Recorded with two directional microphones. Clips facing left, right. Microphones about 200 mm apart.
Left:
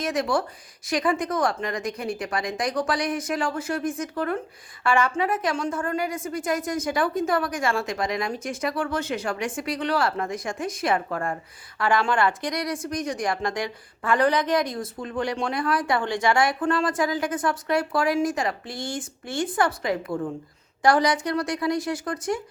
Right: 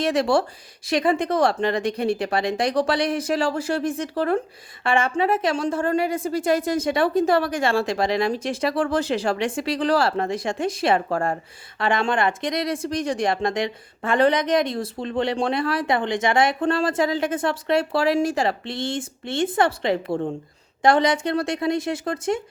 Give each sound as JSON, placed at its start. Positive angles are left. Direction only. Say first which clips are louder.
{"t": 0.0, "sound": "a woman's voice", "louder": "right 5 dB", "side_deg": -30}